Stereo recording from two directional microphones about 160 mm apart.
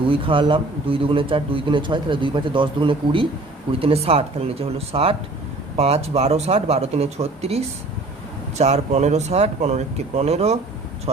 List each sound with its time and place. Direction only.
0.1 s a man's voice: 35° right (ahead or behind)